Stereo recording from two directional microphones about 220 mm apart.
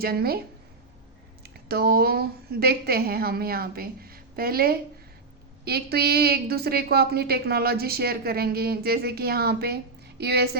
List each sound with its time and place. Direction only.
0.0 s a woman's voice: 45° right (ahead or behind)
1.6 s a woman's voice: 45° right (ahead or behind)